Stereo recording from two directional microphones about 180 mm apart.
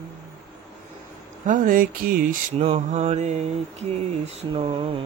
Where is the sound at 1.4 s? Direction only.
45° right (ahead or behind); by 5.0 s 30° right (ahead or behind).